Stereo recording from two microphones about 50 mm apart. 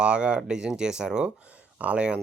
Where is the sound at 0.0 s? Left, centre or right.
Centre.